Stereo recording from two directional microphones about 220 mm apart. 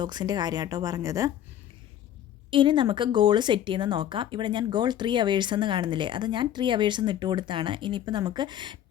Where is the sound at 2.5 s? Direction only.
20° right (ahead or behind).